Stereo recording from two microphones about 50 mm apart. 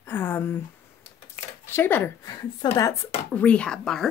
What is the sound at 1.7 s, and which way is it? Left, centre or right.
Speech, left.